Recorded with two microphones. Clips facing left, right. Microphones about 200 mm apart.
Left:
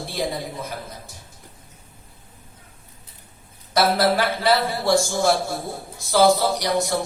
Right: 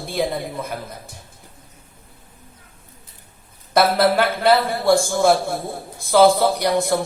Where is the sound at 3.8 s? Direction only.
55° right (ahead or behind).